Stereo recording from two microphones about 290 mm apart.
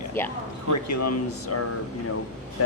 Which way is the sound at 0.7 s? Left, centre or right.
Left.